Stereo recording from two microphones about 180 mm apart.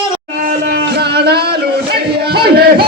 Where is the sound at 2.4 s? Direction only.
60° right (ahead or behind).